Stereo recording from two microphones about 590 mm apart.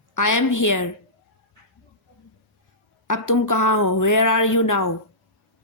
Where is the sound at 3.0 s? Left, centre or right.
Left.